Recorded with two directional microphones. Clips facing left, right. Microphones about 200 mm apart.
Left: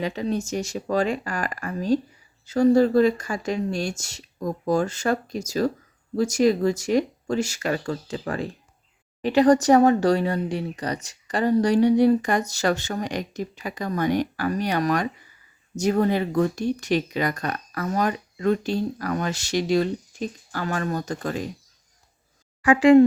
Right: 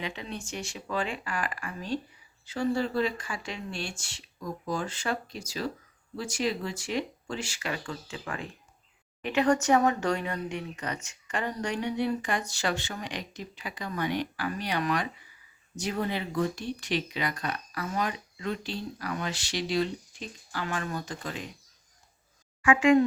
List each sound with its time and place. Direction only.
0.0 s speech: 40° left (ahead or behind)
22.6 s speech: 35° left (ahead or behind)